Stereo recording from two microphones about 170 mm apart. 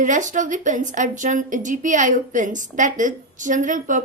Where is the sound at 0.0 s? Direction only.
50° right (ahead or behind).